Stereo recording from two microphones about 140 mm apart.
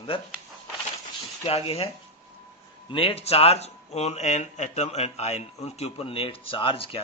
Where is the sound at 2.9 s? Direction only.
40° left (ahead or behind).